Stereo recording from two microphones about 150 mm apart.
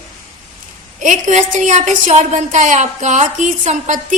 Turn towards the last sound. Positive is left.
turn(degrees=-55)  # may be behind; listen again after turning